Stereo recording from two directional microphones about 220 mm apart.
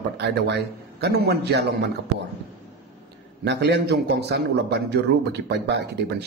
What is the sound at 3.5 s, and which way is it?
A man's voice, 50° right (ahead or behind).